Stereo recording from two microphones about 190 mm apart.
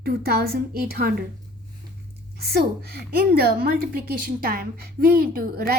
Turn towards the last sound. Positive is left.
turn(degrees=-55)  # may be behind; listen again after turning